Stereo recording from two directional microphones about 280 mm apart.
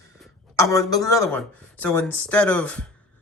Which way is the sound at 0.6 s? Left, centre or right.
Centre.